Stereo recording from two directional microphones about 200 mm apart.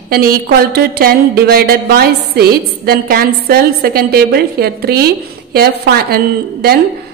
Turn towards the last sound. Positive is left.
turn(degrees=-50)  # may be behind; listen again after turning